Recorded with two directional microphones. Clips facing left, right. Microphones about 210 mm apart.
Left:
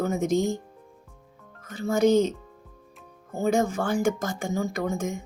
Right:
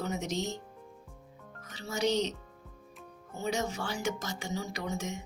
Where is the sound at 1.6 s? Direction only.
50° left (ahead or behind).